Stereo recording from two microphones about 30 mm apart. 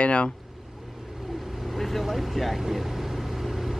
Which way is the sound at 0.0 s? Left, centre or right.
Left.